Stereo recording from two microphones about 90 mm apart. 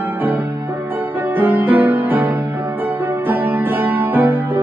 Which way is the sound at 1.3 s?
20° right (ahead or behind).